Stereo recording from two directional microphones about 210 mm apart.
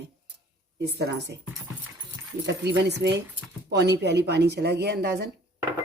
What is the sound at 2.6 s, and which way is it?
Speech, 55° right (ahead or behind).